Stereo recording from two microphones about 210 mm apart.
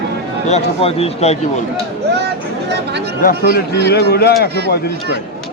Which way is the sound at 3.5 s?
50° left (ahead or behind).